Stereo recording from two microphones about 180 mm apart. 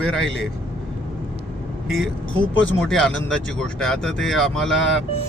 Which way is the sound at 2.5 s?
90° left.